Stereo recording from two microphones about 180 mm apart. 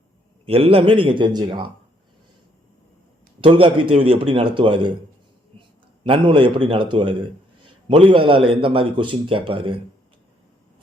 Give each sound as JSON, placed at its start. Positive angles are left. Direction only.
{"t": 0.4, "sound": "speech", "side_deg": -30}
{"t": 3.4, "sound": "a man's voice", "side_deg": -30}